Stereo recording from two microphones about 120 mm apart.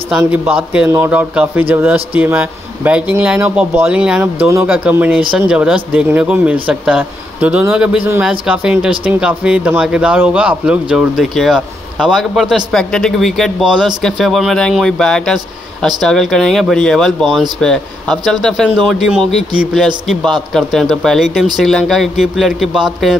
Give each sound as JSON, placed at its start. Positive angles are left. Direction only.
{"t": 0.3, "sound": "speech", "side_deg": -15}
{"t": 4.2, "sound": "speech", "side_deg": -20}
{"t": 4.6, "sound": "speech", "side_deg": -10}